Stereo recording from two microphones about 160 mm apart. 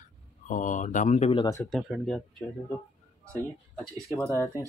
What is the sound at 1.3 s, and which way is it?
Speech, 20° left (ahead or behind).